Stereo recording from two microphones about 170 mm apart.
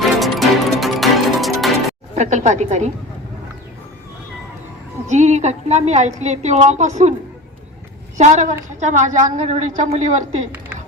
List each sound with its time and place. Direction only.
0.2 s music: centre (ahead or behind)
2.1 s a woman's voice: 45° right (ahead or behind)
5.0 s a woman's voice: 45° right (ahead or behind)
8.2 s a woman's voice: 45° right (ahead or behind)